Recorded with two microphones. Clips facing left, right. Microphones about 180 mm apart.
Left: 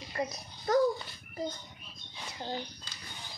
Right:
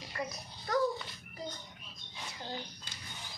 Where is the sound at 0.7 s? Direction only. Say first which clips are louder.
Left 6 dB; 45° left (ahead or behind).